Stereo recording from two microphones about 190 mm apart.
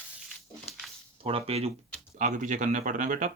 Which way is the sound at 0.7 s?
30° left (ahead or behind).